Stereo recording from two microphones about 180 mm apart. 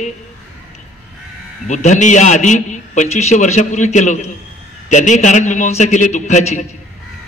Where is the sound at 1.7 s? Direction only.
40° left (ahead or behind).